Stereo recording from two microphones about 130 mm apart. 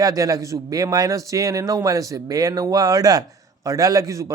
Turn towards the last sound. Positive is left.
turn(degrees=-25)  # may be behind; listen again after turning